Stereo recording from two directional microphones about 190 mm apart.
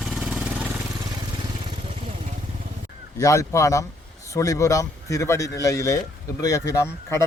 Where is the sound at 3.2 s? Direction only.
15° left (ahead or behind).